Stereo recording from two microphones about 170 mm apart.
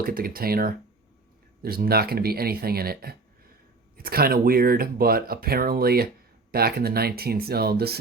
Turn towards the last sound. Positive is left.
turn(degrees=-65)  # may be behind; listen again after turning